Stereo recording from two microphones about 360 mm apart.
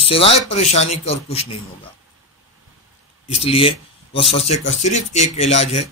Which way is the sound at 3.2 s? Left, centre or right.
Centre.